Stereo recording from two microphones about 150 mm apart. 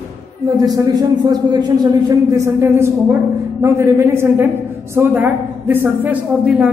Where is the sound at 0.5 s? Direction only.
25° right (ahead or behind).